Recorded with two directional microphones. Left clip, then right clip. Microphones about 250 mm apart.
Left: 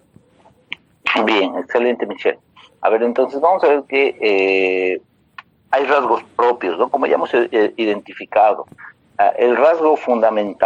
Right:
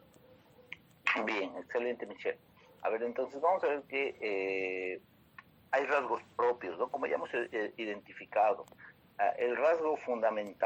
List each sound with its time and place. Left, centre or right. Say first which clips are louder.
0.7 s speech: left 14 dB; left
5.4 s a sound: left 15 dB; left
6.3 s speech: left 16 dB; left